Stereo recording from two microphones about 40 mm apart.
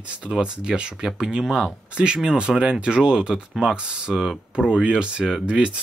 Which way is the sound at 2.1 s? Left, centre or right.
Right.